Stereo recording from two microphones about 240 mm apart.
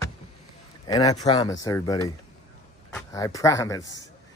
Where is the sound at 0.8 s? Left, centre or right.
Centre.